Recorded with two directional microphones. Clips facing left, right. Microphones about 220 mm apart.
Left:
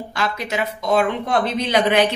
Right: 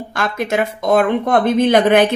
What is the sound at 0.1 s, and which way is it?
Speech, 50° right (ahead or behind).